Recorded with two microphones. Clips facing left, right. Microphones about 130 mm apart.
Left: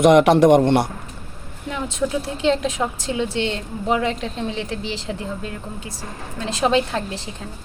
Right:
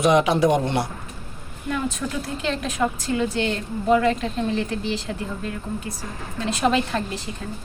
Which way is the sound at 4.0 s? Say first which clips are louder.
Right 2 dB; 25° left (ahead or behind).